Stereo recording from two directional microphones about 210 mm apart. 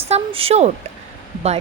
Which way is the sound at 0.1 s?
25° right (ahead or behind).